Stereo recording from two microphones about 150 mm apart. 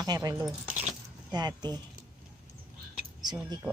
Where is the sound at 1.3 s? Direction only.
25° right (ahead or behind).